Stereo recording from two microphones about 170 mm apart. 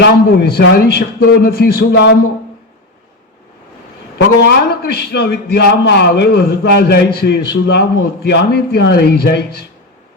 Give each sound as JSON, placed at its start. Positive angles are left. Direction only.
{"t": 0.0, "sound": "a man's voice", "side_deg": 75}
{"t": 4.2, "sound": "a man's voice", "side_deg": 80}